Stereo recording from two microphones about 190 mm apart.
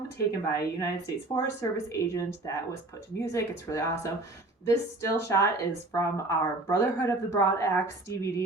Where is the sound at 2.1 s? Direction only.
15° left (ahead or behind).